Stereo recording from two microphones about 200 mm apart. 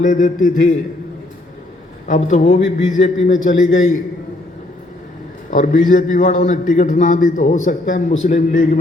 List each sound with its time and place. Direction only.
0.0 s a man's voice: 40° left (ahead or behind)
2.0 s a man's voice: 40° left (ahead or behind)
5.5 s a man's voice: 40° left (ahead or behind)